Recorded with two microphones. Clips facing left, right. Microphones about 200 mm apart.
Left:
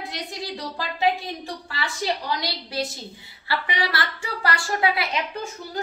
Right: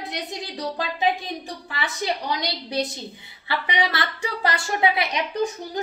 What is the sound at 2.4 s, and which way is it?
A woman's voice, 20° right (ahead or behind).